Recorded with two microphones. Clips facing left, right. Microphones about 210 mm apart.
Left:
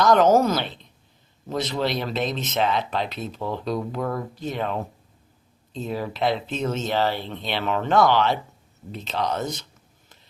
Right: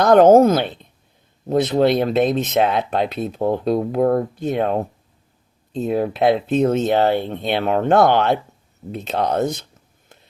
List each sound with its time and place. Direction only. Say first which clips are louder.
0.0 s speech: right 7 dB; 55° right (ahead or behind)